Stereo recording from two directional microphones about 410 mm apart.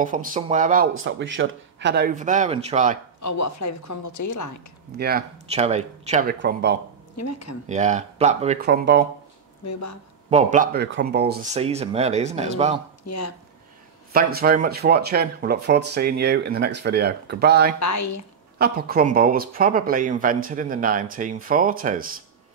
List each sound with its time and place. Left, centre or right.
0.0 s speech: centre
3.2 s speech: left
4.9 s speech: right
7.2 s speech: left
7.6 s speech: centre
9.7 s speech: left
10.3 s speech: centre
13.0 s speech: left
14.1 s speech: right
17.7 s speech: left
18.6 s speech: right